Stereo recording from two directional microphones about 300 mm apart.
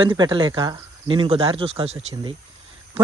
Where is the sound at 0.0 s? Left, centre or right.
Centre.